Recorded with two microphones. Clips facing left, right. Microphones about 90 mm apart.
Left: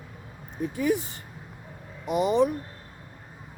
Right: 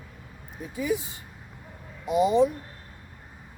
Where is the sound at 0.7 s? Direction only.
60° left (ahead or behind).